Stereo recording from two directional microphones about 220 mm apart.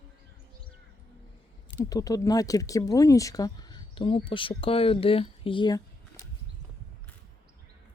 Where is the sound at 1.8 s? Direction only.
15° left (ahead or behind).